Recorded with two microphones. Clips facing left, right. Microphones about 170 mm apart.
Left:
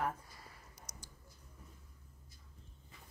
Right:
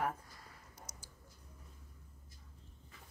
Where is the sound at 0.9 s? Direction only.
10° left (ahead or behind).